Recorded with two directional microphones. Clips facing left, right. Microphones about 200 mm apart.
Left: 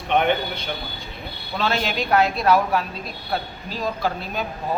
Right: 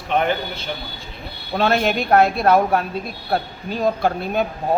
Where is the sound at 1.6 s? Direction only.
55° right (ahead or behind).